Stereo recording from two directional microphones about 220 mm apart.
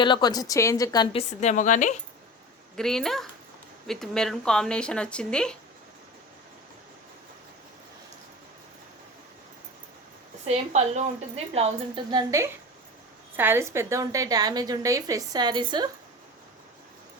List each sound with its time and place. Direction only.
0.0 s a woman's voice: 20° left (ahead or behind)
1.1 s a woman's voice: 30° left (ahead or behind)
2.7 s speech: centre (ahead or behind)
10.4 s a woman's voice: 30° right (ahead or behind)